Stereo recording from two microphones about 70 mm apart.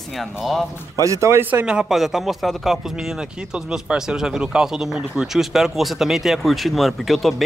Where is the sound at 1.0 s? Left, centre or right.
Right.